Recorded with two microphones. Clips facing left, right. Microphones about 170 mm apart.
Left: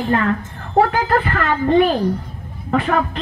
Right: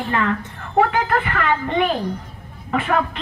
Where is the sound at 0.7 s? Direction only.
40° left (ahead or behind).